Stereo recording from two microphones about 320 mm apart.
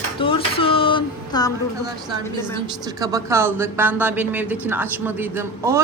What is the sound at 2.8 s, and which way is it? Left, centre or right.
Speech, centre.